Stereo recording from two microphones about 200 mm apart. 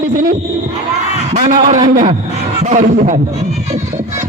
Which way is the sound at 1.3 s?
30° right (ahead or behind).